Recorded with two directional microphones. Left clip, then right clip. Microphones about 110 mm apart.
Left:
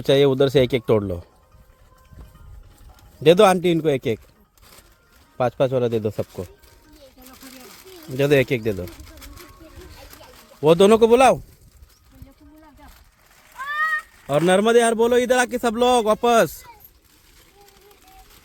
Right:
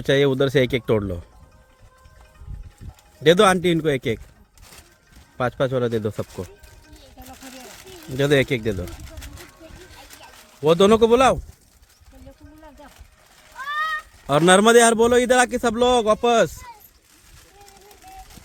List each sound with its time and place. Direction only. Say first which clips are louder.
0.0 s speech: left 2 dB; 30° left (ahead or behind)
3.2 s speech: left 1 dB; 20° left (ahead or behind)
5.4 s speech: left 2 dB; 20° left (ahead or behind)
8.1 s speech: left 1 dB; 20° left (ahead or behind)
10.6 s speech: left 1 dB; 30° left (ahead or behind)
13.8 s a man's voice: left 2 dB; 10° right (ahead or behind); by 15.7 s 5° left (ahead or behind)
15.7 s speech: left 2 dB; 25° left (ahead or behind)